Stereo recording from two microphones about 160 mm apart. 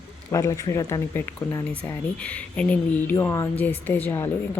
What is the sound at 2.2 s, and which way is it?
A woman's voice, 10° left (ahead or behind).